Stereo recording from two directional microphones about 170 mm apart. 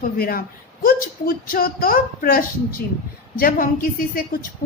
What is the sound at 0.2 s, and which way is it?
Speech, 60° left (ahead or behind).